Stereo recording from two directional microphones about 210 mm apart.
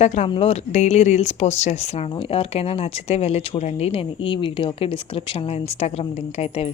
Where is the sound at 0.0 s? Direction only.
30° left (ahead or behind).